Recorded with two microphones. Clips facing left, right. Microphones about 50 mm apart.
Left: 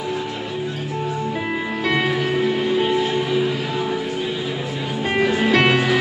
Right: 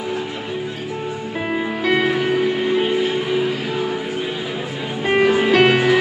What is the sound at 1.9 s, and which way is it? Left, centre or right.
Music, centre.